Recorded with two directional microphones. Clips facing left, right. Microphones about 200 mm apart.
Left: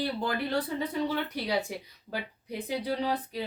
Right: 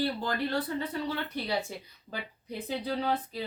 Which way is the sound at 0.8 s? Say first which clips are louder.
Left 3 dB; 15° left (ahead or behind).